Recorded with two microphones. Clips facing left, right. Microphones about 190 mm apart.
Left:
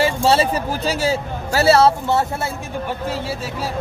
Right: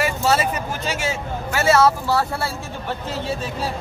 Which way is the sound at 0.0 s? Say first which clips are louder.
Left 4 dB; 30° left (ahead or behind).